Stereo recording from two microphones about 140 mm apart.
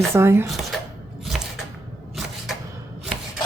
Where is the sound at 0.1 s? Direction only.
20° right (ahead or behind).